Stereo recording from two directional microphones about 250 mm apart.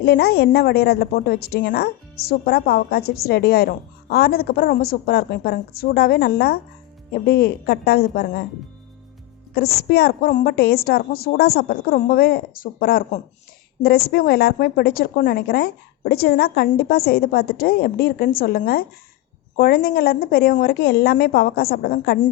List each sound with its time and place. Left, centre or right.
0.0 s a woman's voice: left
9.9 s a woman's voice: left